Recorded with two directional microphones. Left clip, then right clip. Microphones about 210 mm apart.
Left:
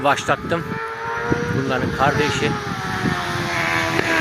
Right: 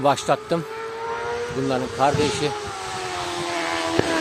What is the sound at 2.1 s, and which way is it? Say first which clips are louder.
Speech: left 2 dB; 10° left (ahead or behind).